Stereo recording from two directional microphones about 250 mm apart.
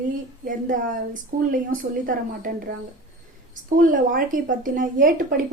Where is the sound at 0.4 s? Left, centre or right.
Right.